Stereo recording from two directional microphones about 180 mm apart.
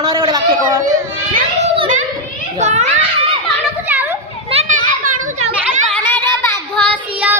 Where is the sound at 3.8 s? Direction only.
10° right (ahead or behind).